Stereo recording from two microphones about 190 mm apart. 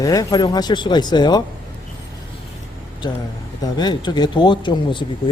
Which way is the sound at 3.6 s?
20° left (ahead or behind).